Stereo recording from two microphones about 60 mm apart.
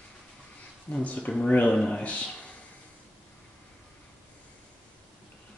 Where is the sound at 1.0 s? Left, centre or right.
Left.